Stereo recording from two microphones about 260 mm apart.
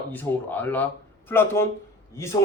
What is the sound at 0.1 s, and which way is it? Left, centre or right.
A man's voice, centre.